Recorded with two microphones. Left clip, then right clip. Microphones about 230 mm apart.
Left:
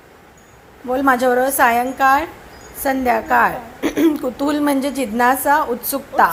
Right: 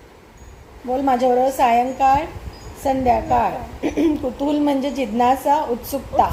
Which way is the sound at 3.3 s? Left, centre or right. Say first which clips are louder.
Left 3 dB; left.